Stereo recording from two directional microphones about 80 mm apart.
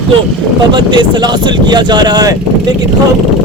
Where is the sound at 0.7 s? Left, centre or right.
Right.